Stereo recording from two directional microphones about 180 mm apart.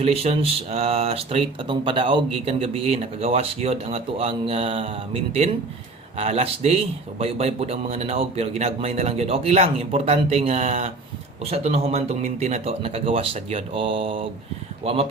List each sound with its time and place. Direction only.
0.0 s speech: 35° right (ahead or behind)